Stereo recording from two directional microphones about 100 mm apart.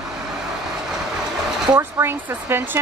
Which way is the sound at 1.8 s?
20° right (ahead or behind).